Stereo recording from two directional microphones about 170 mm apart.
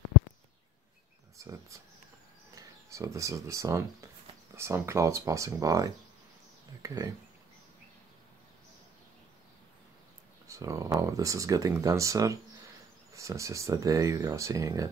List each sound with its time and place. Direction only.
1.4 s speech: 20° right (ahead or behind)
10.4 s a sound: 20° right (ahead or behind)
11.0 s speech: 20° right (ahead or behind)